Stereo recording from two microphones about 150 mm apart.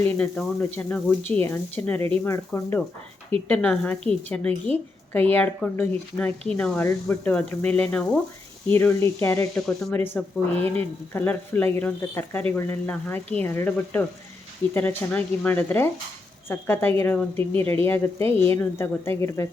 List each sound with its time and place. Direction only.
0.0 s a woman's voice: 10° left (ahead or behind)
9.6 s a woman's voice: 5° left (ahead or behind)